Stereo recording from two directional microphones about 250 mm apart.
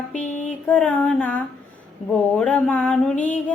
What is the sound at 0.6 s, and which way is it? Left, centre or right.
Child singing, centre.